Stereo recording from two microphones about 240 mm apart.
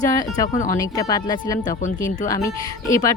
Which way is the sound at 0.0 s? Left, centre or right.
Centre.